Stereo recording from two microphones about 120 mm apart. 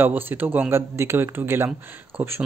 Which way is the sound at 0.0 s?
15° right (ahead or behind).